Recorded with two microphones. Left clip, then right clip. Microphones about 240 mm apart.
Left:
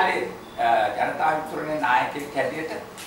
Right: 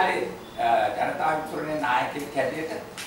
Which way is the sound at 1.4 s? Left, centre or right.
Centre.